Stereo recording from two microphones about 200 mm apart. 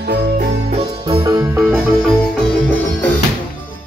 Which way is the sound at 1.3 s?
10° right (ahead or behind).